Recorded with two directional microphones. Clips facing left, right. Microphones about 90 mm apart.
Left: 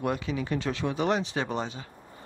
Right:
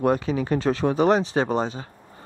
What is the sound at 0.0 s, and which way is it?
Speech, 40° right (ahead or behind).